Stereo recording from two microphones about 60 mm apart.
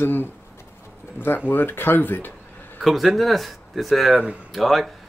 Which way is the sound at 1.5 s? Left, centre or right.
Left.